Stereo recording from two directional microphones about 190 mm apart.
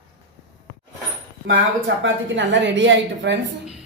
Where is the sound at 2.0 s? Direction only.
70° right (ahead or behind).